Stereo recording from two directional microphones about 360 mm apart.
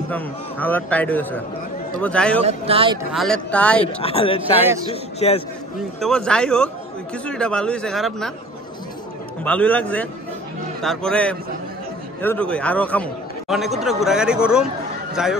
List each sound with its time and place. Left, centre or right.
0.1 s a man's voice: centre
2.4 s speech: centre
3.1 s a man's voice: centre
3.8 s speech: centre
5.9 s a man's voice: centre
9.4 s a man's voice: centre